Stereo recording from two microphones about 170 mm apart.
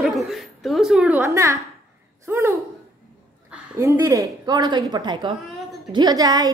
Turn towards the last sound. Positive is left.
turn(degrees=-25)  # may be behind; listen again after turning